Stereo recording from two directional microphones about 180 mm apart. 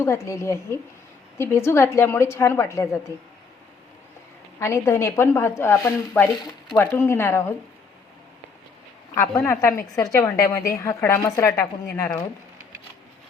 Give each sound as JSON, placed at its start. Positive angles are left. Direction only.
{"t": 0.0, "sound": "a woman's voice", "side_deg": 15}
{"t": 4.6, "sound": "a woman's voice", "side_deg": 15}
{"t": 6.3, "sound": "speech", "side_deg": 25}
{"t": 6.7, "sound": "a woman's voice", "side_deg": 10}
{"t": 9.1, "sound": "a woman's voice", "side_deg": 15}